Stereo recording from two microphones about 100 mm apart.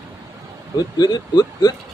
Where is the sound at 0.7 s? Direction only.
45° left (ahead or behind).